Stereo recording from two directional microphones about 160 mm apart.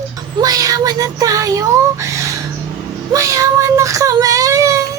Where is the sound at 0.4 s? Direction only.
25° right (ahead or behind).